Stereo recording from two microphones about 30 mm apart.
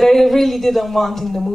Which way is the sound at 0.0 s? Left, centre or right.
Centre.